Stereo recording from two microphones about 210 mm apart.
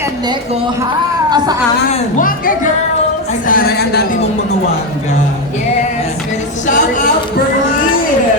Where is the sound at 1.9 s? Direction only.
40° left (ahead or behind).